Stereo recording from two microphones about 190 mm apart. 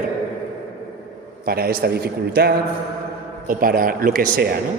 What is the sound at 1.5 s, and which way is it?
A man's voice, 50° right (ahead or behind).